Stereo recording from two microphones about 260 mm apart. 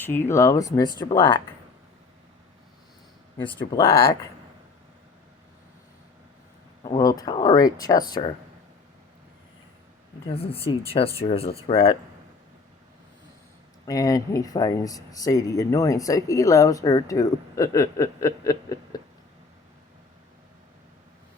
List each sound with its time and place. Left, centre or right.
0.0 s speech: centre
3.4 s speech: centre
6.8 s speech: centre
10.3 s speech: left
13.8 s speech: centre